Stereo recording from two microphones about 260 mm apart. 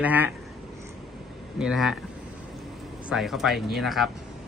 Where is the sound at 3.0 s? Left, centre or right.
Centre.